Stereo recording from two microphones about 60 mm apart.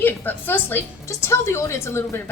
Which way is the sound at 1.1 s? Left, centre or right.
Left.